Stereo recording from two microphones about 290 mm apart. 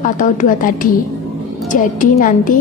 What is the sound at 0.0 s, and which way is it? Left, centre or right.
A woman's voice, left.